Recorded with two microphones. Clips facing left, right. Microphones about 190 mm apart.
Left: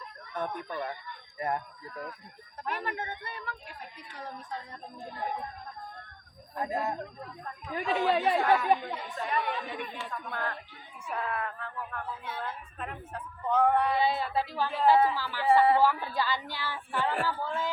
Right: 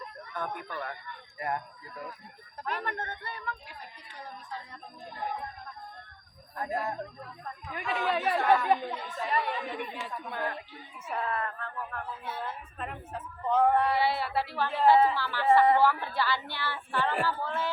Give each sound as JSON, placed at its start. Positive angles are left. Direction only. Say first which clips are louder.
{"t": 0.3, "sound": "speech", "louder": "left 2 dB", "side_deg": 20}
{"t": 2.6, "sound": "a woman's voice", "louder": "even", "side_deg": 5}
{"t": 3.2, "sound": "speech", "louder": "right 2 dB", "side_deg": 25}
{"t": 6.6, "sound": "speech", "louder": "left 1 dB", "side_deg": 20}
{"t": 7.7, "sound": "speech", "louder": "left 3 dB", "side_deg": 30}
{"t": 8.4, "sound": "a woman's voice", "louder": "even", "side_deg": 10}
{"t": 11.0, "sound": "speech", "louder": "right 1 dB", "side_deg": 0}
{"t": 12.8, "sound": "speech", "louder": "right 1 dB", "side_deg": 0}
{"t": 14.0, "sound": "a woman's voice", "louder": "even", "side_deg": 20}